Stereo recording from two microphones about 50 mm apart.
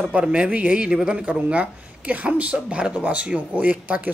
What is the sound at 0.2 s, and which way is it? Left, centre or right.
Speech, right.